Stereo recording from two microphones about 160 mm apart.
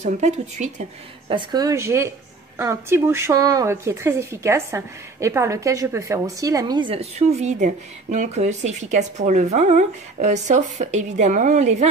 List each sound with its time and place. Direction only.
0.0 s speech: 45° right (ahead or behind)
1.3 s a woman's voice: 25° right (ahead or behind); by 11.9 s 50° right (ahead or behind)